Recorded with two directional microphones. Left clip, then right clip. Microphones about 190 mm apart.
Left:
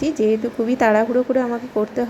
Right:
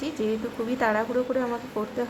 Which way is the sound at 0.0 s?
20° left (ahead or behind).